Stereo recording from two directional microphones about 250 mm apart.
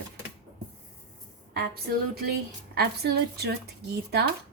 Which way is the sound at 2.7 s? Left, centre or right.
Right.